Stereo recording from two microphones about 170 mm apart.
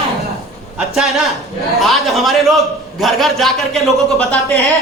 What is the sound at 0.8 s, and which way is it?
A man's voice, centre (ahead or behind).